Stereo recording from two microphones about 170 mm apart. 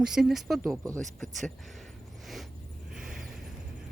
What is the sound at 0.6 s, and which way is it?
Speech, 20° right (ahead or behind).